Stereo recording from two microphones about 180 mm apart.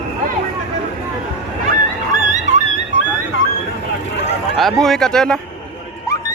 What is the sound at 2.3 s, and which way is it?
Music, 40° right (ahead or behind).